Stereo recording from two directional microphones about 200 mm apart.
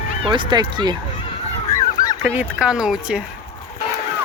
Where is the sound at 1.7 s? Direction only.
20° left (ahead or behind).